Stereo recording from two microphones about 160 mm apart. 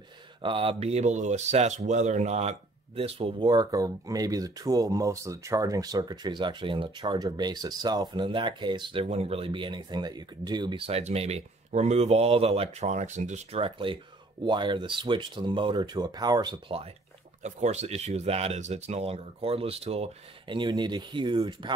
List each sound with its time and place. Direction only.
0.4 s speech: 30° right (ahead or behind)
17.4 s speech: 45° right (ahead or behind); by 21.7 s 30° right (ahead or behind)